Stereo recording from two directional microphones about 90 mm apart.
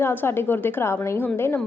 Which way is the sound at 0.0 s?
25° left (ahead or behind).